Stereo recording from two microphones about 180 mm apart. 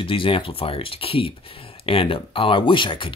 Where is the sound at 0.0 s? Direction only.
30° left (ahead or behind).